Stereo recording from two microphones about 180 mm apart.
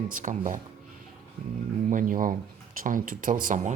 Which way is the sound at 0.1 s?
45° right (ahead or behind).